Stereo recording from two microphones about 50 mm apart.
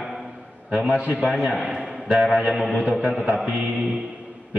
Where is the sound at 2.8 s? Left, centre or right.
Right.